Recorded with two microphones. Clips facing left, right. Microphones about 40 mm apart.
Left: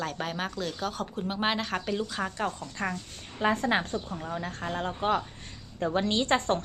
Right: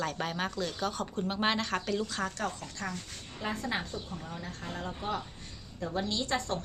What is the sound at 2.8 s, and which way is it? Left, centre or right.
Speech, left.